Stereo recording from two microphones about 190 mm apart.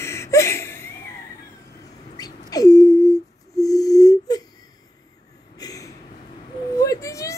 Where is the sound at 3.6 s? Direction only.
20° left (ahead or behind).